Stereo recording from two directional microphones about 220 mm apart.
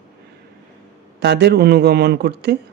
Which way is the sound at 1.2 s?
50° right (ahead or behind).